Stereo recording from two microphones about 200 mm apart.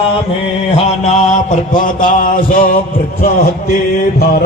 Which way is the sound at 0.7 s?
30° left (ahead or behind).